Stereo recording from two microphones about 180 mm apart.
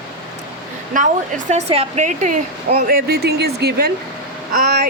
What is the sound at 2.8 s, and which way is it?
Speech, 55° right (ahead or behind).